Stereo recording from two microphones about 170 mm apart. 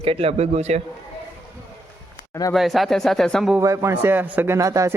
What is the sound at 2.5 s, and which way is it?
A man's voice, centre (ahead or behind).